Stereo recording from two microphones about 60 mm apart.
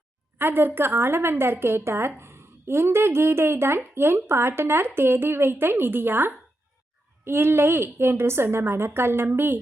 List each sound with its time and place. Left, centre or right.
0.3 s a woman's voice: right